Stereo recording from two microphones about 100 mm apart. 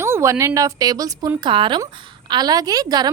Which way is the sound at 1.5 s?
55° right (ahead or behind).